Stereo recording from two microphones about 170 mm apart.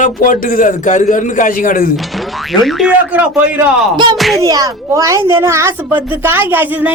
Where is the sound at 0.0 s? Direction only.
50° left (ahead or behind).